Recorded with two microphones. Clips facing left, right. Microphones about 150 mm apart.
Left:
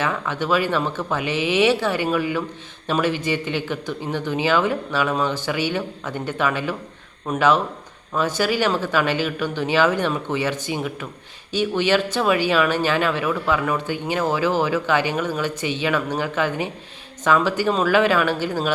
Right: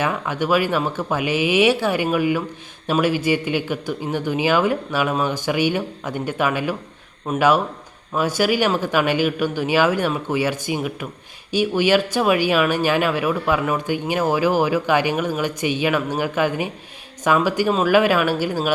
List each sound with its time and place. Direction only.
0.0 s speech: 15° right (ahead or behind)